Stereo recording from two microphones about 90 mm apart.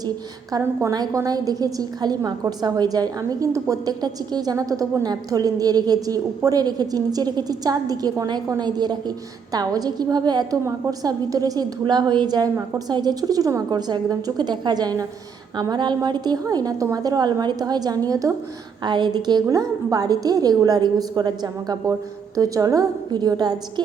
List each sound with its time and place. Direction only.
0.6 s a woman's voice: 35° right (ahead or behind)
0.9 s a woman's voice: 45° right (ahead or behind)
18.8 s a woman's voice: 55° right (ahead or behind)